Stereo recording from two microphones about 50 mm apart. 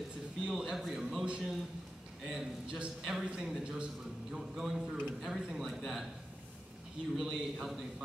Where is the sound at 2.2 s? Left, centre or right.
Centre.